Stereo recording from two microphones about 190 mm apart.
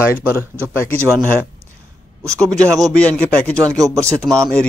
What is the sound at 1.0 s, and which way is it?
Speech, 15° right (ahead or behind).